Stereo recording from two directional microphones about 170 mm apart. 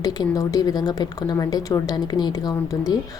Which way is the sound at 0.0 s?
25° left (ahead or behind).